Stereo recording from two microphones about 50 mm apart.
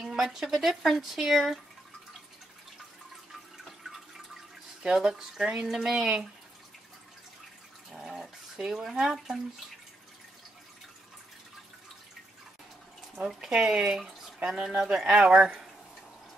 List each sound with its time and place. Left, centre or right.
0.0 s speech: centre
3.6 s water: centre
4.8 s speech: centre
5.7 s speech: centre
7.9 s bathtub: centre
13.5 s speech: centre